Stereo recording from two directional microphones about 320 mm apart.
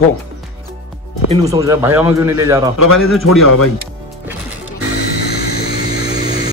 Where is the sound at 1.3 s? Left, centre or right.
Centre.